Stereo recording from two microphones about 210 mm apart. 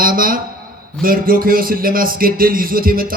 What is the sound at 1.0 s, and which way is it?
Speech, 45° right (ahead or behind).